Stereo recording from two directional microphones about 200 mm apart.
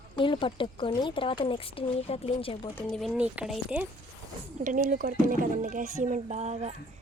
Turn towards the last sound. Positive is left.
turn(degrees=-35)  # may be behind; listen again after turning